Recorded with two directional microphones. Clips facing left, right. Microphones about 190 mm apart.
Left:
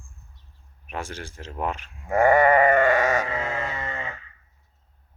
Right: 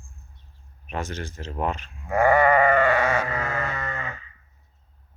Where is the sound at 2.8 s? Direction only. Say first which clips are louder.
Left 1 dB; 20° left (ahead or behind).